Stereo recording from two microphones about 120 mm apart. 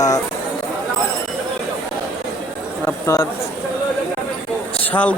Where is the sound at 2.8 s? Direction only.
20° left (ahead or behind).